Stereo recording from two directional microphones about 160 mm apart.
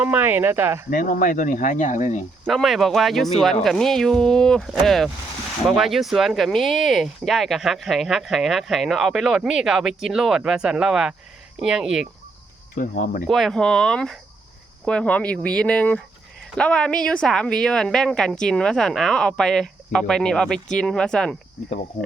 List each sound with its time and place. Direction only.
0.0 s speech: 10° right (ahead or behind)
0.9 s speech: 60° left (ahead or behind)
2.5 s speech: centre (ahead or behind)
12.7 s speech: 60° left (ahead or behind)
13.2 s speech: centre (ahead or behind)